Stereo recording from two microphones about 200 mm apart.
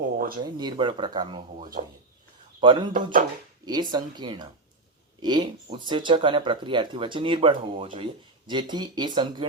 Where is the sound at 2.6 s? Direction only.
25° right (ahead or behind).